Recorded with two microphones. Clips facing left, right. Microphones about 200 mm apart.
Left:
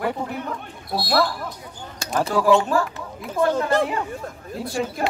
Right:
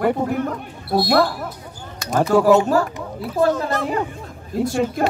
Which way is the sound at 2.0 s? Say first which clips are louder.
Right 4 dB; 30° left (ahead or behind).